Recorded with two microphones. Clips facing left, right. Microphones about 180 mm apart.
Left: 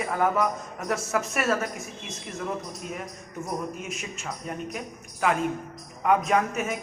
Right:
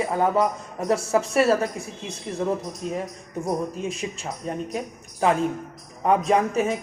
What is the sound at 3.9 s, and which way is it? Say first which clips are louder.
A man's voice: right 4 dB; 30° right (ahead or behind).